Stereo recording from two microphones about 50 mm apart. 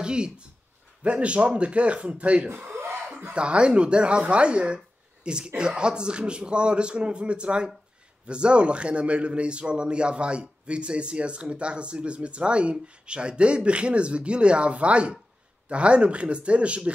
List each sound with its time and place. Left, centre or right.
0.0 s a man's voice: centre